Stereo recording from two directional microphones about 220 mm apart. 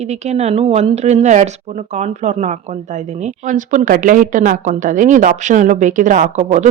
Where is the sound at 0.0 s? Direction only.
30° right (ahead or behind).